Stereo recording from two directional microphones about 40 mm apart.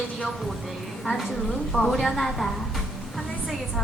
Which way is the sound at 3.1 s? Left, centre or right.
Centre.